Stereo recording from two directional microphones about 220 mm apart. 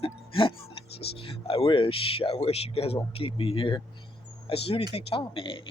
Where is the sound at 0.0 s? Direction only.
25° left (ahead or behind).